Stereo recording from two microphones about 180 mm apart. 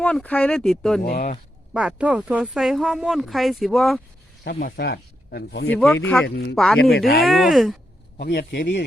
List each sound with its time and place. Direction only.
0.0 s speech: 5° left (ahead or behind)
1.0 s speech: 55° left (ahead or behind)
1.7 s speech: 5° right (ahead or behind)
4.4 s speech: 60° left (ahead or behind)
5.7 s speech: 10° left (ahead or behind)
6.2 s speech: 90° left
6.7 s speech: 60° left (ahead or behind)
7.3 s speech: centre (ahead or behind)
8.2 s speech: 65° left (ahead or behind)